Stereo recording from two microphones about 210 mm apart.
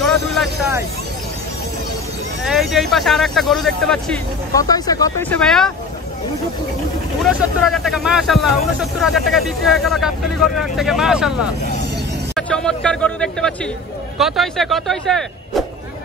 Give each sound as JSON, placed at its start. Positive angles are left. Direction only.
{"t": 0.0, "sound": "vehicle", "side_deg": 0}
{"t": 2.4, "sound": "speech", "side_deg": 0}
{"t": 4.6, "sound": "speech", "side_deg": 20}
{"t": 5.4, "sound": "speech", "side_deg": 5}
{"t": 7.2, "sound": "speech", "side_deg": 0}
{"t": 12.4, "sound": "speech", "side_deg": 5}